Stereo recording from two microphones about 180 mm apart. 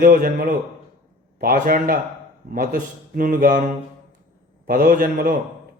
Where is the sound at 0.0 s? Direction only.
50° right (ahead or behind).